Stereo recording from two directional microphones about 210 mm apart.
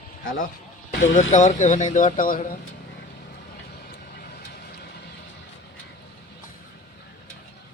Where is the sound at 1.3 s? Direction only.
35° left (ahead or behind).